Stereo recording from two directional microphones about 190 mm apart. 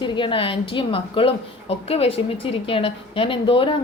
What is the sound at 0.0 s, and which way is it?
A woman's voice, 25° left (ahead or behind).